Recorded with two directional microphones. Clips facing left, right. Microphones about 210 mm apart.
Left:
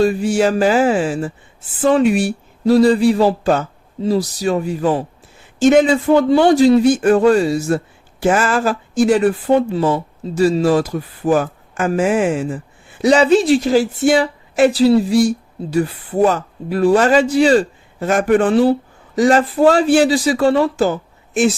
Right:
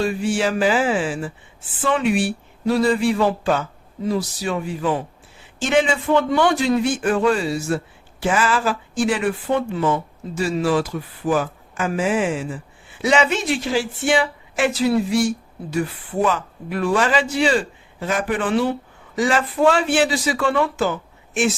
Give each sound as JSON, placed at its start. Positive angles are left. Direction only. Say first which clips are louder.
{"t": 0.0, "sound": "speech", "louder": "left 6 dB", "side_deg": 40}